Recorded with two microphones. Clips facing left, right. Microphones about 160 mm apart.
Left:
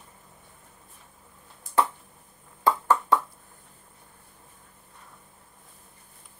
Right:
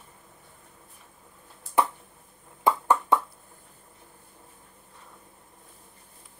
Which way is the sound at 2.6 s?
20° right (ahead or behind).